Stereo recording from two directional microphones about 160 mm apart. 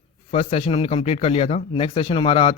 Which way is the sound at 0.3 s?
40° left (ahead or behind).